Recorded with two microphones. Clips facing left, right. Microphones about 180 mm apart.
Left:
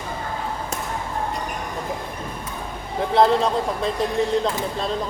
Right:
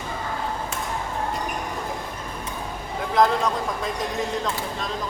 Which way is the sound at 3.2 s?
30° left (ahead or behind).